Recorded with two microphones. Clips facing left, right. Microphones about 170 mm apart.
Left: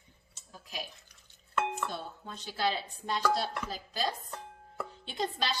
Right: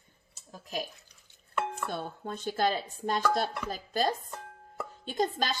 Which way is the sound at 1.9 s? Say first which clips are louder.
Right 5 dB; 50° right (ahead or behind).